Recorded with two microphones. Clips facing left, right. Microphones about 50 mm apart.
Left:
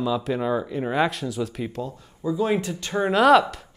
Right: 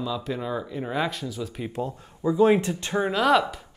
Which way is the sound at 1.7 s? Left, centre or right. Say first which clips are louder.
Right 1 dB; right.